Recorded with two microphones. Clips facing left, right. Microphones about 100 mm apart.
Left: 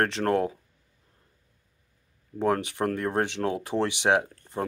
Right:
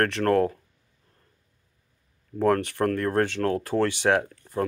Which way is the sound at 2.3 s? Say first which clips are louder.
Right 3 dB; 15° left (ahead or behind).